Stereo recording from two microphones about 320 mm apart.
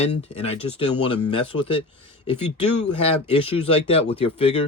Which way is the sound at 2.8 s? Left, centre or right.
Centre.